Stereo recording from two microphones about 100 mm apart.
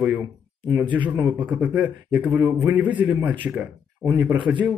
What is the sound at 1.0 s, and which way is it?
Speech, 45° right (ahead or behind).